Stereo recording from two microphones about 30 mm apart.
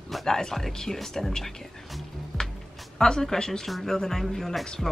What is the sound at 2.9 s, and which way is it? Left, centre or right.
Speech, left.